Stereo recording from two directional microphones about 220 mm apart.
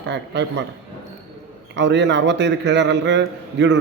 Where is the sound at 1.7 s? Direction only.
55° right (ahead or behind).